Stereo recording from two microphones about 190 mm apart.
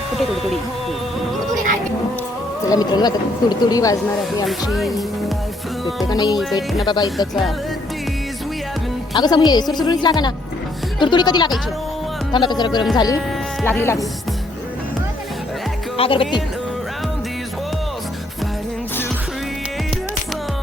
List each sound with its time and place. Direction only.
2.6 s speech: 20° left (ahead or behind)
4.4 s music: centre (ahead or behind)
6.1 s speech: 20° left (ahead or behind)
6.4 s music: centre (ahead or behind)
6.8 s speech: 20° left (ahead or behind)
9.1 s speech: 20° left (ahead or behind)
13.7 s music: 10° left (ahead or behind)
16.0 s speech: 30° left (ahead or behind)